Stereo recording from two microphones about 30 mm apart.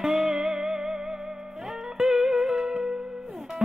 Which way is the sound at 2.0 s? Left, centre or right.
Centre.